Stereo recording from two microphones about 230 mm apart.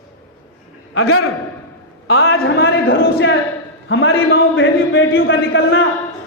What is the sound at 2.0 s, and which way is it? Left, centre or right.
A man's voice, left.